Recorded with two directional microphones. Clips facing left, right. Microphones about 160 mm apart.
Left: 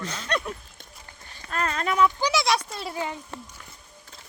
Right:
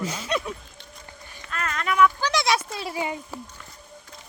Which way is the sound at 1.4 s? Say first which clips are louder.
Left 3 dB; 35° left (ahead or behind).